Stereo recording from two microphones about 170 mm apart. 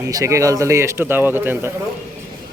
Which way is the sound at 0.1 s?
20° right (ahead or behind).